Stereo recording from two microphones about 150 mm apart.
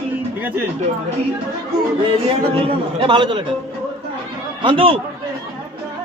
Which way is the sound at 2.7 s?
35° right (ahead or behind).